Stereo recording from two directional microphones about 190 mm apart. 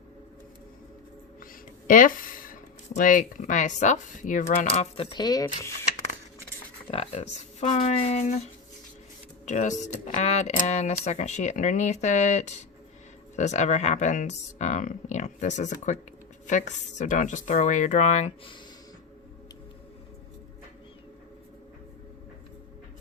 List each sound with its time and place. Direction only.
1.9 s speech: 45° left (ahead or behind)
4.7 s speech: 30° left (ahead or behind)
6.9 s speech: 35° left (ahead or behind)
9.5 s speech: 40° left (ahead or behind)